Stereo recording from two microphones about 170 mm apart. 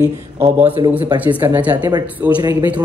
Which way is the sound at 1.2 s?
10° right (ahead or behind).